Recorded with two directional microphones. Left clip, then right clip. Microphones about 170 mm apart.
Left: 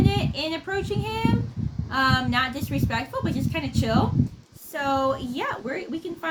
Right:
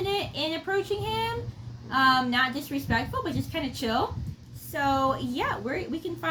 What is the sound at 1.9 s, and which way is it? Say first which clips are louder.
A woman's voice: even; 25° left (ahead or behind).